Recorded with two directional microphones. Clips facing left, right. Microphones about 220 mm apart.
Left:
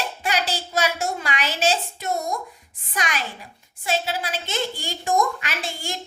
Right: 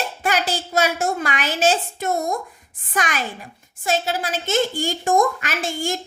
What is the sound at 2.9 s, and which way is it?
A child's voice, 50° right (ahead or behind).